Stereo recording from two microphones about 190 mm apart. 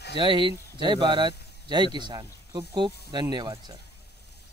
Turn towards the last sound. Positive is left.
turn(degrees=-20)  # may be behind; listen again after turning